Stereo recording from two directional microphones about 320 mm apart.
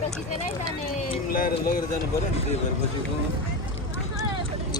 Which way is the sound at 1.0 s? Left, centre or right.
Left.